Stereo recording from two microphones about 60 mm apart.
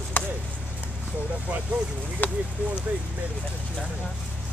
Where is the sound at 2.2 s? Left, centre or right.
Left.